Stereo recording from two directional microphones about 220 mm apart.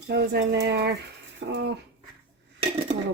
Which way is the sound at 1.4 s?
60° right (ahead or behind).